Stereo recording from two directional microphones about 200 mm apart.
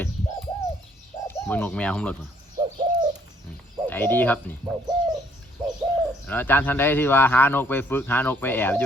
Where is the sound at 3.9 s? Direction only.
10° left (ahead or behind).